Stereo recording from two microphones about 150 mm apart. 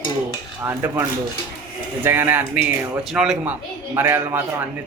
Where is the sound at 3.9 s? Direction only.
15° right (ahead or behind).